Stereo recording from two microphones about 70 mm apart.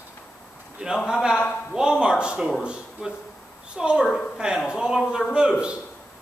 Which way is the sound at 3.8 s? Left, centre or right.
Centre.